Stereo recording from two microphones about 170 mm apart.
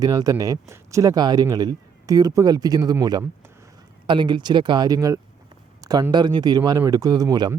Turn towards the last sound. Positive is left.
turn(degrees=-20)  # may be behind; listen again after turning